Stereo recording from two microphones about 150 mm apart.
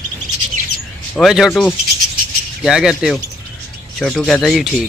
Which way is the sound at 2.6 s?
5° right (ahead or behind).